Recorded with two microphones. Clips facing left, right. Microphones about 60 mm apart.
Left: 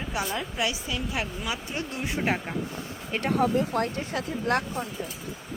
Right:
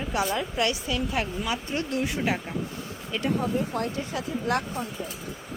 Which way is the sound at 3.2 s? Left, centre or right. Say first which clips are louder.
Left 1 dB; left.